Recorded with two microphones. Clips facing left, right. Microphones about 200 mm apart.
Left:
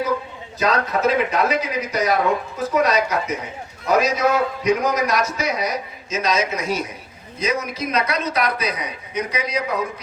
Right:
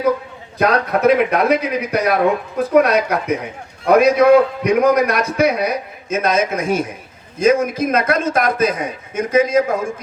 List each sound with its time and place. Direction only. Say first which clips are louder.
0.6 s a man's voice: right 5 dB; 60° right (ahead or behind)